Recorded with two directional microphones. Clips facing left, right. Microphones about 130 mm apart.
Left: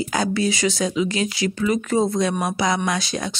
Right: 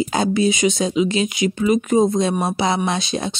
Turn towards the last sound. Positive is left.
turn(degrees=-25)  # may be behind; listen again after turning